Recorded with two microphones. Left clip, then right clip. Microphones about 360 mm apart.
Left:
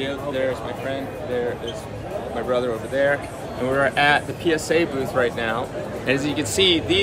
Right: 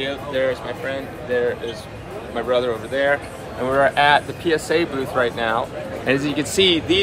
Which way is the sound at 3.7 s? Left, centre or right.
Centre.